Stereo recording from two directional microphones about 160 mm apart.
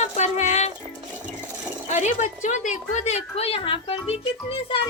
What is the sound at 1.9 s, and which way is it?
A woman's voice, 50° left (ahead or behind).